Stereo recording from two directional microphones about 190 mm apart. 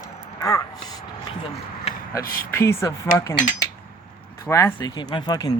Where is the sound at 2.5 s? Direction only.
15° left (ahead or behind).